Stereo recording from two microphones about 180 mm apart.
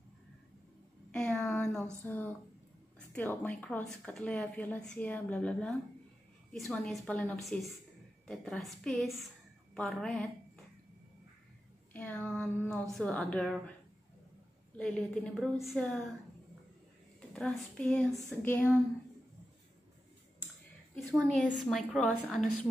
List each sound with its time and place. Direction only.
1.1 s a sound: 5° left (ahead or behind)
2.0 s a woman's voice: 10° left (ahead or behind)
11.9 s a sound: 5° left (ahead or behind)
12.9 s a woman's voice: 5° left (ahead or behind)
14.8 s a woman's voice: 5° left (ahead or behind)
17.3 s a woman's voice: 5° left (ahead or behind)
20.9 s a woman's voice: centre (ahead or behind)